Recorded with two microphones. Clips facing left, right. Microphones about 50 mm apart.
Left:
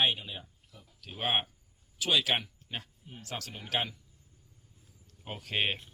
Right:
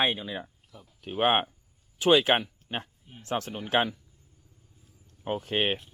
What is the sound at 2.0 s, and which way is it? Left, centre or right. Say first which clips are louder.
Speech: right 8 dB; right.